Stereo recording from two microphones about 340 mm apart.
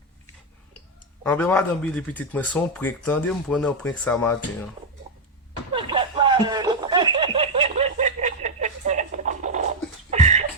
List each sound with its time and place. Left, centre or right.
1.2 s speech: centre
5.7 s snicker: centre